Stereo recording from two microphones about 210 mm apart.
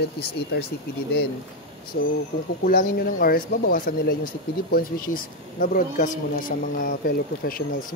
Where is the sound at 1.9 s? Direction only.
50° left (ahead or behind).